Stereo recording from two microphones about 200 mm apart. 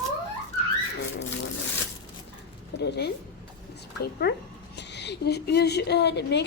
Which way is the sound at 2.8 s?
55° left (ahead or behind).